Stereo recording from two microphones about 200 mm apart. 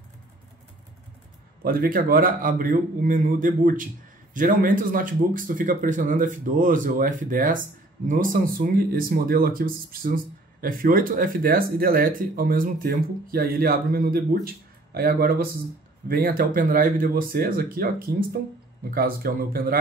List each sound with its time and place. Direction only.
1.6 s speech: 45° right (ahead or behind)